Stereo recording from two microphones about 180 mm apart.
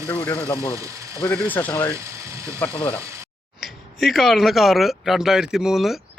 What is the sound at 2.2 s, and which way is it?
Speech, 15° right (ahead or behind).